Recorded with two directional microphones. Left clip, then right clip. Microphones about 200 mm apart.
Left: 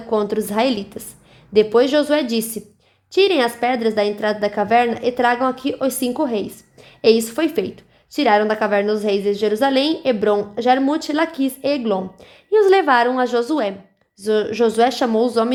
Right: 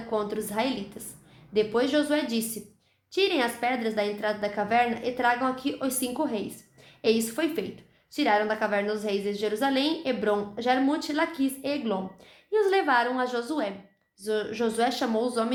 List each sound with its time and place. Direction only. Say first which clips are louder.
0.1 s a woman's voice: left 10 dB; 45° left (ahead or behind)